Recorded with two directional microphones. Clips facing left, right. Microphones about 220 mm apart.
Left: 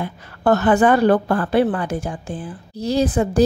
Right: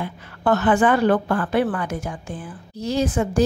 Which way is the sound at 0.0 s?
40° left (ahead or behind).